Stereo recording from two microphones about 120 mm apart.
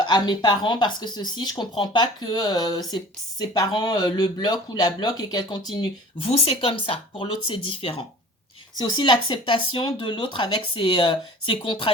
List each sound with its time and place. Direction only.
0.0 s speech: 40° left (ahead or behind)
6.2 s speech: 55° left (ahead or behind)
8.8 s speech: 40° left (ahead or behind)